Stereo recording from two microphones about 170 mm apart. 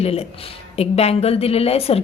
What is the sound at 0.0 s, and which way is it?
A woman's voice, 35° left (ahead or behind).